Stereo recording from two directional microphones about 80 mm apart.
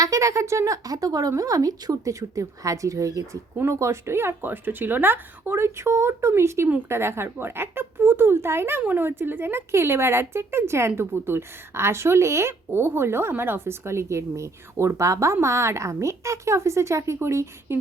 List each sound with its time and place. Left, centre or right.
0.0 s speech: right
0.9 s a woman's voice: right